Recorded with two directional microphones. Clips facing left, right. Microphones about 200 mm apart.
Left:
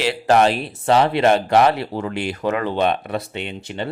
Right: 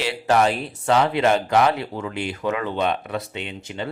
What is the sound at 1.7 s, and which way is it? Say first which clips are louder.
Speech: left 3 dB; 40° left (ahead or behind).